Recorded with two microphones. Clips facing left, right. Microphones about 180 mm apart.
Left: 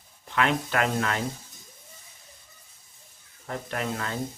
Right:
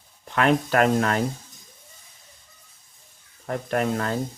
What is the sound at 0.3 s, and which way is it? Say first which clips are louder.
Speech: right 5 dB; 45° right (ahead or behind).